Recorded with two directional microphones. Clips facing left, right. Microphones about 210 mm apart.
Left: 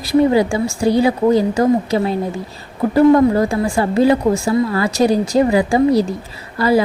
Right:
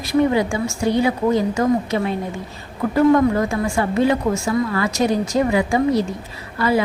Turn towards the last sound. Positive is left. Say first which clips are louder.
# left 4 dB
turn(degrees=35)  # may be behind; listen again after turning